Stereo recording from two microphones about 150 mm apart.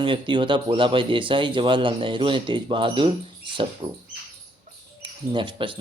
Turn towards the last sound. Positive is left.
turn(degrees=-35)  # may be behind; listen again after turning